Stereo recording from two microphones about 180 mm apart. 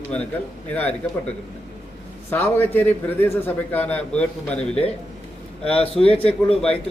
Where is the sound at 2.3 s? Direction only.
10° left (ahead or behind).